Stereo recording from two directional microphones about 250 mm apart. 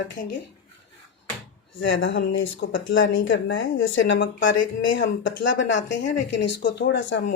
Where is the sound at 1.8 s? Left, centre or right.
Left.